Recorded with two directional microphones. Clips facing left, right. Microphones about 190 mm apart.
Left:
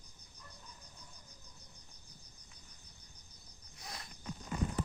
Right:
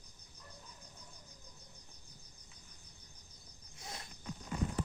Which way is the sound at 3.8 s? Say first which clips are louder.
Right 1 dB; 25° right (ahead or behind).